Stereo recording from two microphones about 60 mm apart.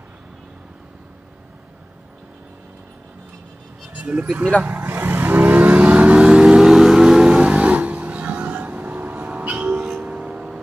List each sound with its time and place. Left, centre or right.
3.9 s vehicle: right
10.0 s music: centre